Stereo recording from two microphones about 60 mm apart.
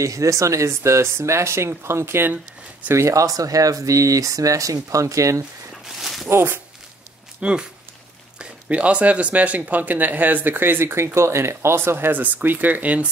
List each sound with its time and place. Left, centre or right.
0.0 s speech: right
2.9 s speech: right
5.9 s walk: centre
6.2 s speech: right
7.3 s speech: centre; by 12.2 s right
12.2 s speech: right